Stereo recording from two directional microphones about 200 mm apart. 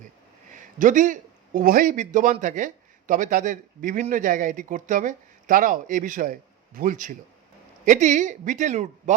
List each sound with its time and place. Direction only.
0.5 s a man's voice: 40° right (ahead or behind)